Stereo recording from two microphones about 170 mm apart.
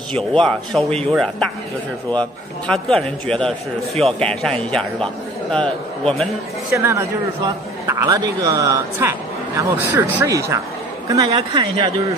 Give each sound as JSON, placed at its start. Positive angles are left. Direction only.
{"t": 0.1, "sound": "a man's voice", "side_deg": 5}
{"t": 6.7, "sound": "a man's voice", "side_deg": -15}
{"t": 11.3, "sound": "speech", "side_deg": -30}